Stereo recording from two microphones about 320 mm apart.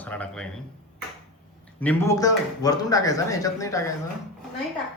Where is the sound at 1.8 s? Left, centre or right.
Centre.